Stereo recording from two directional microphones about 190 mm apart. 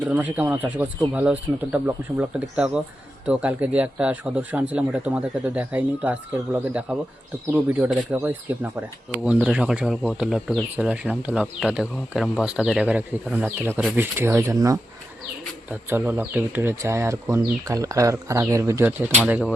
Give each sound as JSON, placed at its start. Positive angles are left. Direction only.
{"t": 0.0, "sound": "speech", "side_deg": -5}